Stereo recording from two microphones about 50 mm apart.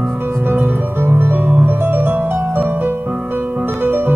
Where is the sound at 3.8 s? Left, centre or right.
Right.